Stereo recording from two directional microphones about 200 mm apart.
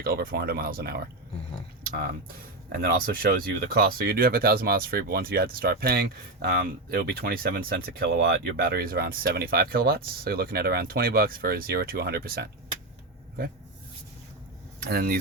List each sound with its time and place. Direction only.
0.0 s speech: 50° right (ahead or behind)
2.8 s speech: 50° right (ahead or behind)
14.8 s speech: 50° right (ahead or behind)